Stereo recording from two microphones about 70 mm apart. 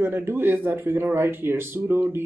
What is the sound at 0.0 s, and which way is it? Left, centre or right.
Speech, right.